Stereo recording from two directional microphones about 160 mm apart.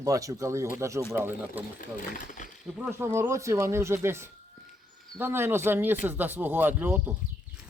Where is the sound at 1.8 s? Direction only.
55° left (ahead or behind).